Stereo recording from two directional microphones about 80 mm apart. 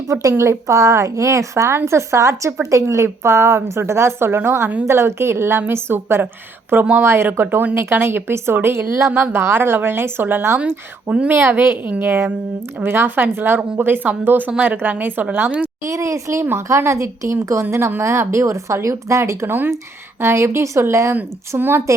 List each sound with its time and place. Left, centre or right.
0.1 s speech: right; by 15.7 s centre
15.8 s speech: right